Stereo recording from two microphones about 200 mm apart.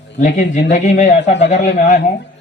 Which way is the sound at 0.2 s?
40° left (ahead or behind).